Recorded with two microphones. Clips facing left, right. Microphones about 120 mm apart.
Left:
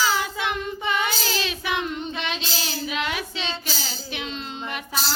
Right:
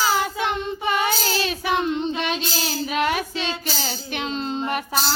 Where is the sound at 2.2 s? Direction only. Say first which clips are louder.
Right 4 dB; 45° right (ahead or behind).